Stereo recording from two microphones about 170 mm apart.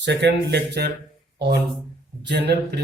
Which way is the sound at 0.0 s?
90° right.